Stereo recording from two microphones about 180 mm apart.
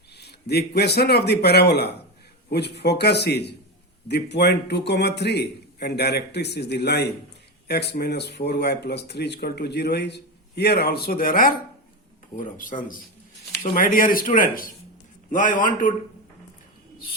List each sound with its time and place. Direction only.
0.2 s a man's voice: 65° left (ahead or behind); by 15.9 s 45° left (ahead or behind)